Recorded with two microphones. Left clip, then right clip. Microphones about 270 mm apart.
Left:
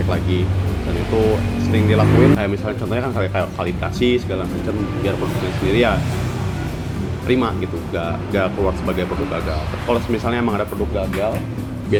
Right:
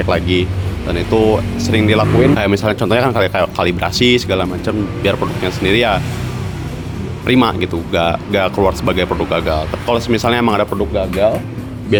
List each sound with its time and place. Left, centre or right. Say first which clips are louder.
0.1 s speech: right 8 dB; right
1.6 s speech: right 4 dB; right
5.6 s speech: right 4 dB; right
7.3 s speech: right 6 dB; right